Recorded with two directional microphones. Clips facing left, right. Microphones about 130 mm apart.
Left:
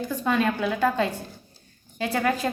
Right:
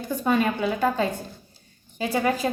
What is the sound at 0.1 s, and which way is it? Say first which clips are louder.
A woman's voice: right 2 dB; 10° right (ahead or behind).